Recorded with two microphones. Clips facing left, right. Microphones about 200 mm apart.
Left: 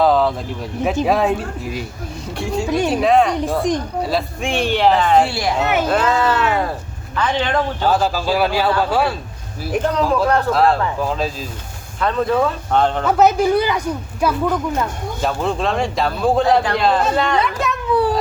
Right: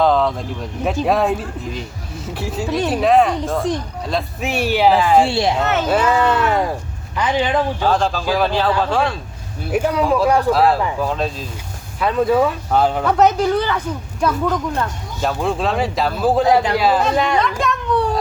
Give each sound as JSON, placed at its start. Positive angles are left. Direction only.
{"t": 0.0, "sound": "speech", "side_deg": 5}
{"t": 3.4, "sound": "speech", "side_deg": 15}
{"t": 4.1, "sound": "speech", "side_deg": -5}
{"t": 5.3, "sound": "speech", "side_deg": -25}
{"t": 5.5, "sound": "speech", "side_deg": 10}
{"t": 5.9, "sound": "speech", "side_deg": -10}
{"t": 7.9, "sound": "speech", "side_deg": 5}
{"t": 9.7, "sound": "speech", "side_deg": -10}
{"t": 13.1, "sound": "speech", "side_deg": 5}
{"t": 17.4, "sound": "speech", "side_deg": 5}